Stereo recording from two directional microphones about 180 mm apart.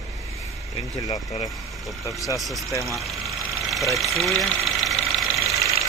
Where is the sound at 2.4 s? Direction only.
Centre (ahead or behind).